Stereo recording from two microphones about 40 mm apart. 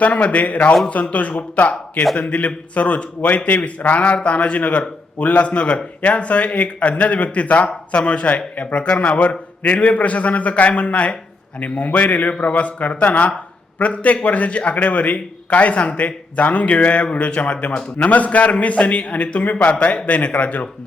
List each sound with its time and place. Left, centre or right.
0.0 s speech: left